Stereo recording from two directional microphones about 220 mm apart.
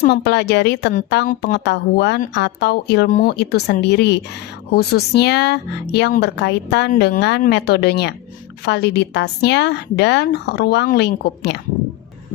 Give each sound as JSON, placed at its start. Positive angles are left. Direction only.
{"t": 0.0, "sound": "speech", "side_deg": 50}
{"t": 1.3, "sound": "a woman's voice", "side_deg": 35}
{"t": 1.5, "sound": "speech", "side_deg": 50}